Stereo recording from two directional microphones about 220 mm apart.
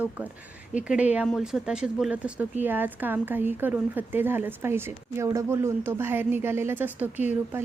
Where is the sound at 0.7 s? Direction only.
5° right (ahead or behind).